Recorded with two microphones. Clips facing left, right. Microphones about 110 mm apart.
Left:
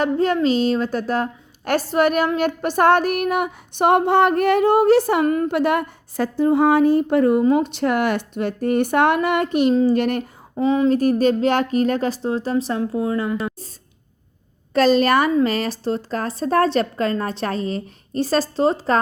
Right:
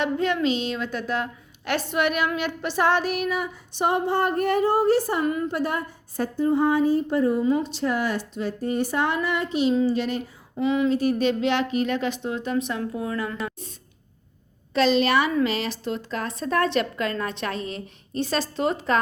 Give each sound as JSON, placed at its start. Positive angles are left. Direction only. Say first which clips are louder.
{"t": 0.0, "sound": "a woman's voice", "louder": "left 5 dB", "side_deg": 40}
{"t": 5.2, "sound": "a woman's voice", "louder": "left 6 dB", "side_deg": 50}
{"t": 5.5, "sound": "a woman's voice", "louder": "left 7 dB", "side_deg": 75}
{"t": 10.5, "sound": "a woman's voice", "louder": "left 5 dB", "side_deg": 35}
{"t": 14.7, "sound": "a woman's voice", "louder": "left 5 dB", "side_deg": 45}